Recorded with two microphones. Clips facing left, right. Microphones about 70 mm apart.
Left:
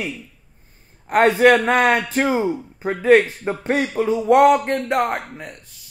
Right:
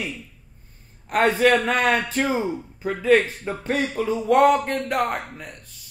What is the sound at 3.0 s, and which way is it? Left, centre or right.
Music, left.